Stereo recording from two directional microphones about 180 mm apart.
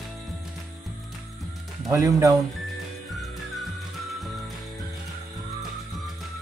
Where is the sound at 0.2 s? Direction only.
Centre (ahead or behind).